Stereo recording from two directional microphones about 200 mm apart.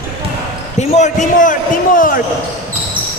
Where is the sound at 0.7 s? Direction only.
35° left (ahead or behind).